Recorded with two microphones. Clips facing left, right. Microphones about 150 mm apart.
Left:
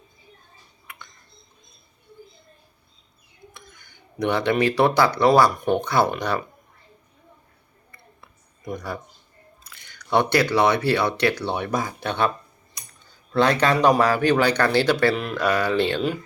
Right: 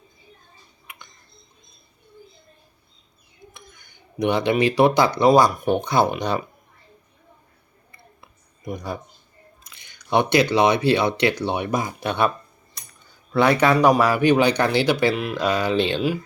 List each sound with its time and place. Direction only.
4.2 s speech: 15° right (ahead or behind)
5.8 s speech: 15° right (ahead or behind)
8.2 s a sound: 15° right (ahead or behind)
9.6 s speech: 15° right (ahead or behind)
13.3 s speech: 10° right (ahead or behind)
15.1 s speech: 5° right (ahead or behind)
15.4 s speech: 15° right (ahead or behind)